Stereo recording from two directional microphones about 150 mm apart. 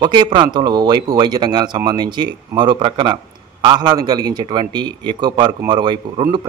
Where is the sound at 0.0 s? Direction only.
30° right (ahead or behind).